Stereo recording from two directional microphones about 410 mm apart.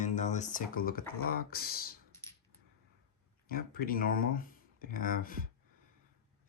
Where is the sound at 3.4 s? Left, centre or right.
Left.